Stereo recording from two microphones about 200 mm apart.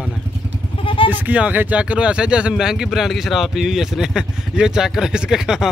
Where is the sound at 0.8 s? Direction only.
25° left (ahead or behind).